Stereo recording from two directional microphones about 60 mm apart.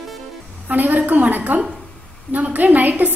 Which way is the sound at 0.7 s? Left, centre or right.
Right.